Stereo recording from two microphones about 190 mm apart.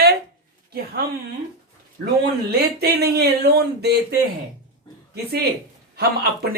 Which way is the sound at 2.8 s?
55° right (ahead or behind).